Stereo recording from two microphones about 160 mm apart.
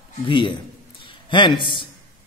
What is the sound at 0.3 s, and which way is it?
A man's voice, 30° left (ahead or behind).